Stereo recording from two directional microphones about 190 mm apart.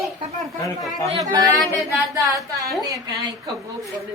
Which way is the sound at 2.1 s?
15° right (ahead or behind).